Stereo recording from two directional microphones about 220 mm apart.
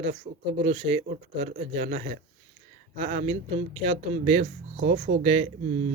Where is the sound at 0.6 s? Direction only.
25° right (ahead or behind).